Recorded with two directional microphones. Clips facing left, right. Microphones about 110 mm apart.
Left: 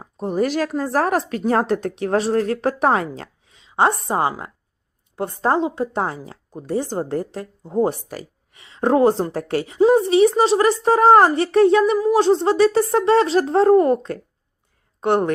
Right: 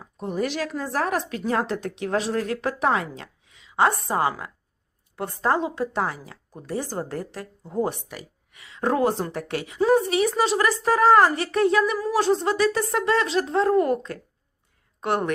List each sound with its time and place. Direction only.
0.0 s a woman's voice: 40° left (ahead or behind)
11.9 s a woman's voice: 20° left (ahead or behind)